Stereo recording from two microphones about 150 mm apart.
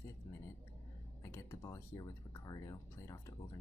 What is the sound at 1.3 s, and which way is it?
Speech, 20° left (ahead or behind).